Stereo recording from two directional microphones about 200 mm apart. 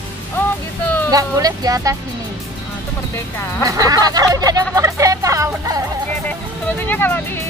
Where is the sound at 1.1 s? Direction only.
20° right (ahead or behind).